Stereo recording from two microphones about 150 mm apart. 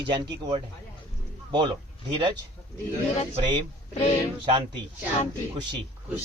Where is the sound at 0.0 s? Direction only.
30° right (ahead or behind).